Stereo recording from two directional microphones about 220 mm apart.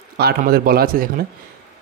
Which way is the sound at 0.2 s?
45° right (ahead or behind).